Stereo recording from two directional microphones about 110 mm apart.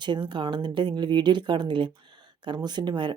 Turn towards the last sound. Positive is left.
turn(degrees=-45)  # may be behind; listen again after turning